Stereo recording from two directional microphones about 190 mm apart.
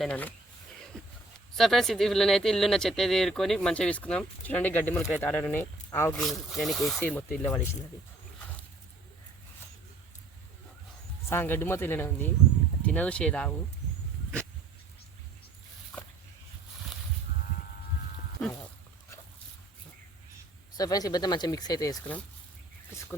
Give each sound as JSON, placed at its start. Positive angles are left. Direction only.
{"t": 0.0, "sound": "speech", "side_deg": 10}
{"t": 1.5, "sound": "speech", "side_deg": 0}
{"t": 6.1, "sound": "speech", "side_deg": 0}
{"t": 11.3, "sound": "speech", "side_deg": 10}
{"t": 20.7, "sound": "speech", "side_deg": 20}